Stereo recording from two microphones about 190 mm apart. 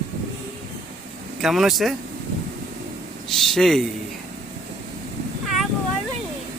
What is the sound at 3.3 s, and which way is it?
Speech, centre (ahead or behind).